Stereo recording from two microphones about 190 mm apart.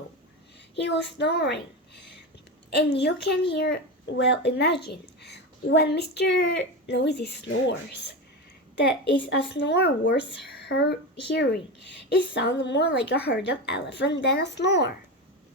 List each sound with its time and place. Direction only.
0.8 s speech: 65° left (ahead or behind)
2.6 s speech: 60° left (ahead or behind)